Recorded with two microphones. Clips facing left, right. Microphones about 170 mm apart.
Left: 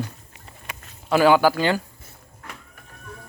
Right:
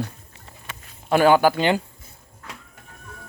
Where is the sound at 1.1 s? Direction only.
50° right (ahead or behind).